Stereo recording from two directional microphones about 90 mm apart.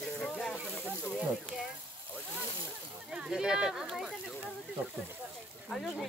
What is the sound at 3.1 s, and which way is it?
Speech, 5° right (ahead or behind).